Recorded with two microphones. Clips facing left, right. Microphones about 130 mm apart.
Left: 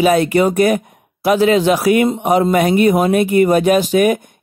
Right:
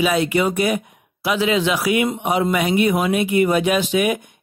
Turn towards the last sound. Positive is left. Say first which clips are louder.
# left 6 dB
turn(degrees=45)  # may be behind; listen again after turning